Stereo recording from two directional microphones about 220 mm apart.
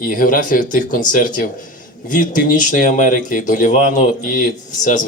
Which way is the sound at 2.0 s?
35° left (ahead or behind).